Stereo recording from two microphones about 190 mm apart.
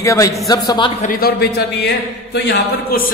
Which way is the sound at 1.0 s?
50° left (ahead or behind).